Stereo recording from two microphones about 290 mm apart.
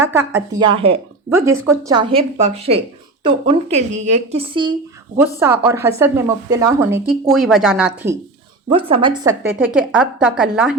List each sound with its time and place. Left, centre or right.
0.0 s a woman's voice: centre
5.4 s speech: centre
8.7 s a woman's voice: centre